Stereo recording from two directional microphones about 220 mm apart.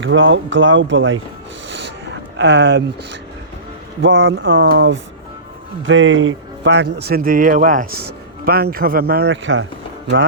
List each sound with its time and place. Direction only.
0.0 s speech: 60° right (ahead or behind)
2.4 s speech: 55° right (ahead or behind)